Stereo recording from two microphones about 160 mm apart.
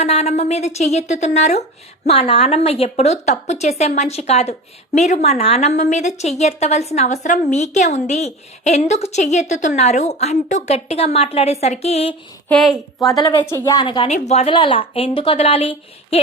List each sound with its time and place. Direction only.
0.0 s a woman's voice: 40° left (ahead or behind)
12.5 s a woman's voice: centre (ahead or behind)
13.1 s a woman's voice: 25° left (ahead or behind)
14.1 s a woman's voice: 45° left (ahead or behind)
14.5 s a woman's voice: 30° left (ahead or behind)